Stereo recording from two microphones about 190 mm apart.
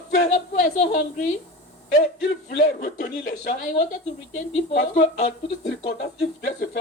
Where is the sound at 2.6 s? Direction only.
45° left (ahead or behind).